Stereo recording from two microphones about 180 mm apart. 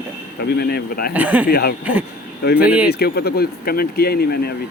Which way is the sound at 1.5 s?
60° left (ahead or behind).